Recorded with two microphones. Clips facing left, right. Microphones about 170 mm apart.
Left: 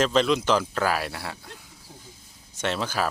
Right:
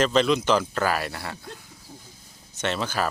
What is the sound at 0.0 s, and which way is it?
Speech, centre (ahead or behind).